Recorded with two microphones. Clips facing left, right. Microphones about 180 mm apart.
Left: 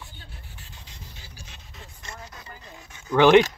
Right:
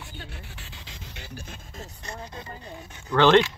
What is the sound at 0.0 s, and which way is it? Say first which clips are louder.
Pant: right 5 dB; 80° right.